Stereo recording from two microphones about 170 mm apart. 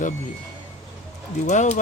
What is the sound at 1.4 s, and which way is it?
Speech, 45° left (ahead or behind).